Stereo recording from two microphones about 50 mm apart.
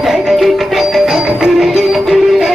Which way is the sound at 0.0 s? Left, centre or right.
Centre.